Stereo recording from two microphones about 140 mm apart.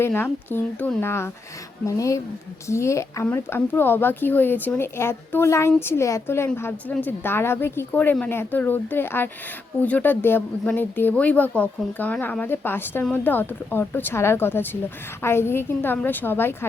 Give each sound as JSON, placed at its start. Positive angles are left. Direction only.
{"t": 0.0, "sound": "a woman's voice", "side_deg": 15}